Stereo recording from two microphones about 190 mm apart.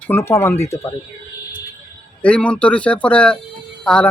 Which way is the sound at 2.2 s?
5° left (ahead or behind).